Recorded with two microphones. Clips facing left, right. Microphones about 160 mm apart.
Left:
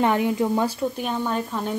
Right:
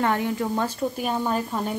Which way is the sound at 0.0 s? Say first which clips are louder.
Left 3 dB; 20° left (ahead or behind).